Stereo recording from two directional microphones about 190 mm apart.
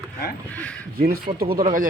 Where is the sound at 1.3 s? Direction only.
50° right (ahead or behind).